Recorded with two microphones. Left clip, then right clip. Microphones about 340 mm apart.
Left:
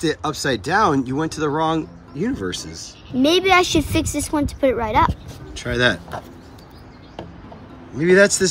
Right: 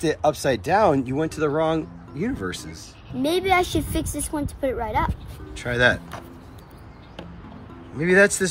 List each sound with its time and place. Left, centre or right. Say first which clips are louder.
0.0 s speech: right 1 dB; centre
3.2 s a woman's voice: left 5 dB; left
5.5 s speech: left 1 dB; centre
8.0 s speech: left 3 dB; centre